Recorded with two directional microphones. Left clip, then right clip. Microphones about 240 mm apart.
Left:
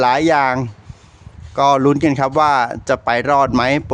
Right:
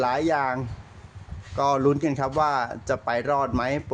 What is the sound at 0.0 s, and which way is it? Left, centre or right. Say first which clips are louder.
Speech: left 10 dB; left.